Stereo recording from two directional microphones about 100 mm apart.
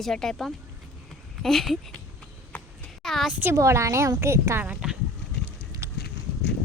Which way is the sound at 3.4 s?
30° right (ahead or behind).